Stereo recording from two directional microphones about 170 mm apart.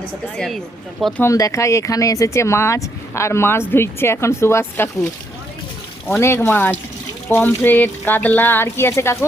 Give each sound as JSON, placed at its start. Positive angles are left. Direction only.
{"t": 0.3, "sound": "speech", "side_deg": 0}
{"t": 1.3, "sound": "speech", "side_deg": 20}
{"t": 6.1, "sound": "speech", "side_deg": 15}